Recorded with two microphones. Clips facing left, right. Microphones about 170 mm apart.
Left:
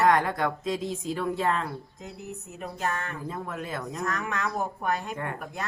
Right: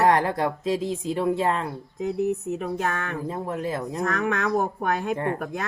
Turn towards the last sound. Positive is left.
turn(degrees=-30)  # may be behind; listen again after turning